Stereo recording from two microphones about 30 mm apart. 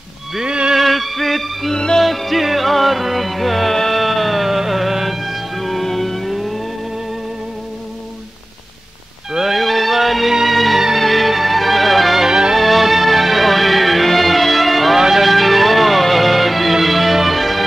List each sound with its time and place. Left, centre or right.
0.4 s music: right
0.7 s music: centre
3.7 s music: centre
4.0 s music: centre
9.3 s music: centre
9.6 s music: centre
12.3 s music: right
12.5 s music: centre
15.0 s music: centre
15.2 s music: centre